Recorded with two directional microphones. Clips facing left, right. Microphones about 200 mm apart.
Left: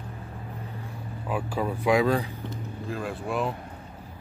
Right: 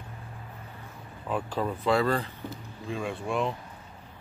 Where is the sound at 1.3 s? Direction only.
10° left (ahead or behind).